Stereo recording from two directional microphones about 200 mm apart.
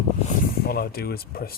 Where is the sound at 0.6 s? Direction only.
50° left (ahead or behind).